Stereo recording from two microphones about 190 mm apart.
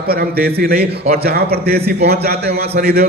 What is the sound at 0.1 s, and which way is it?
A man's voice, 55° right (ahead or behind).